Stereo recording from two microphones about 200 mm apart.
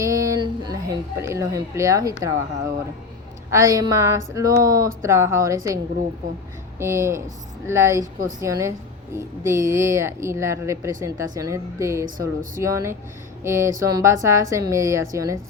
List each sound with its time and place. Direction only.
0.0 s speech: 15° right (ahead or behind)
3.5 s a woman's voice: 15° right (ahead or behind)